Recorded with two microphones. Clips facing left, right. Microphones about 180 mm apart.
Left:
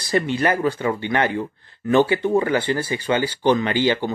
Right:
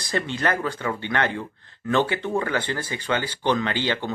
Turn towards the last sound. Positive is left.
turn(degrees=10)  # may be behind; listen again after turning